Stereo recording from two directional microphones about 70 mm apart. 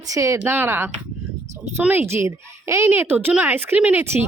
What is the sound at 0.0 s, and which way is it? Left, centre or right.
Speech, right.